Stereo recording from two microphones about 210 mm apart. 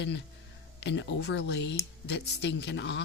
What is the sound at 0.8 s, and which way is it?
Speech, 60° left (ahead or behind).